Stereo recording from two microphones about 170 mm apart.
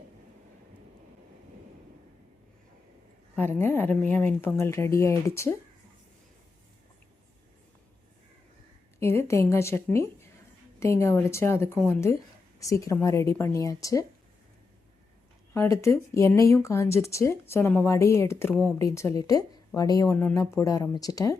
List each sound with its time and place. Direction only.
3.3 s speech: 10° left (ahead or behind)
9.0 s speech: 15° left (ahead or behind)
15.5 s speech: 15° left (ahead or behind)
20.1 s speech: 10° left (ahead or behind)